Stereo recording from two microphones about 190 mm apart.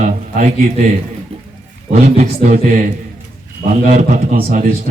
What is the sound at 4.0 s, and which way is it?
Speech, 45° right (ahead or behind).